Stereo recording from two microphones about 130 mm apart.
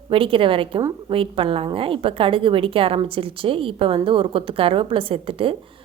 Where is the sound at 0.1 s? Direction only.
45° right (ahead or behind).